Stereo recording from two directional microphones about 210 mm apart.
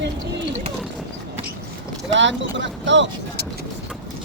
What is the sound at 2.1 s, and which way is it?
Speech, 60° right (ahead or behind).